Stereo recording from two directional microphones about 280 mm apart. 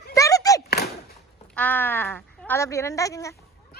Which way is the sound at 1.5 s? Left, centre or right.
Centre.